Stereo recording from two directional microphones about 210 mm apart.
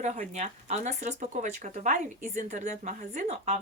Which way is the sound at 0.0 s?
35° right (ahead or behind).